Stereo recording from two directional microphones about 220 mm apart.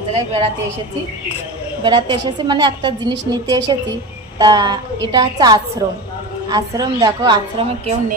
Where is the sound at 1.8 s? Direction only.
20° right (ahead or behind).